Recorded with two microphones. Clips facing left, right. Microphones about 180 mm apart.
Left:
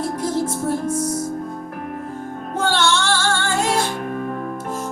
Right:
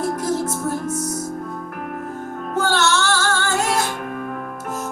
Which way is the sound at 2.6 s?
30° left (ahead or behind).